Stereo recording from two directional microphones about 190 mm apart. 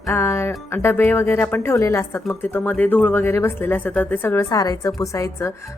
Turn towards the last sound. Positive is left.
turn(degrees=15)  # may be behind; listen again after turning